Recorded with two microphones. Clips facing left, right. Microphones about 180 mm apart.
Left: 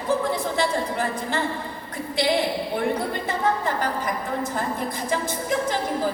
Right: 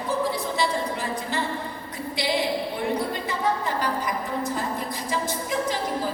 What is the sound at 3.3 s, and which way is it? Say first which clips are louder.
A woman's voice: left 4 dB; 50° left (ahead or behind).